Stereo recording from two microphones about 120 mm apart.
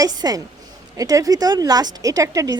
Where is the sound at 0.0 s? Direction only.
30° right (ahead or behind).